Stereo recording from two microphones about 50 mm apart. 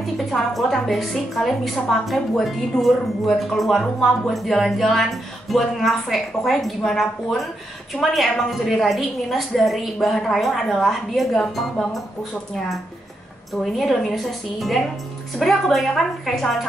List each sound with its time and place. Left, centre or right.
0.0 s a woman's voice: centre
13.5 s speech: centre